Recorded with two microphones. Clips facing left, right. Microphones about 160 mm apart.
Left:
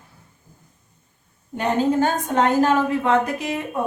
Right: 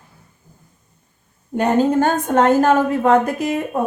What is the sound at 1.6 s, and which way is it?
A woman's voice, 45° right (ahead or behind).